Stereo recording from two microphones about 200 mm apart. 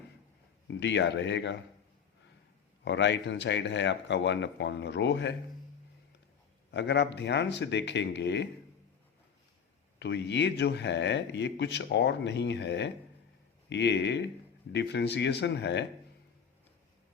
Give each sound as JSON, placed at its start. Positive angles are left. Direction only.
{"t": 0.7, "sound": "a man's voice", "side_deg": 60}
{"t": 2.8, "sound": "a man's voice", "side_deg": 60}
{"t": 6.7, "sound": "a man's voice", "side_deg": 60}
{"t": 10.0, "sound": "a man's voice", "side_deg": 55}